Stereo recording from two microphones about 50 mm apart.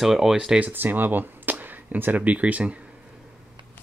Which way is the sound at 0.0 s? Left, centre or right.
Centre.